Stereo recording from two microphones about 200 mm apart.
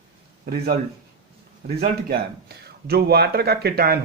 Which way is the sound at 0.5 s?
50° right (ahead or behind).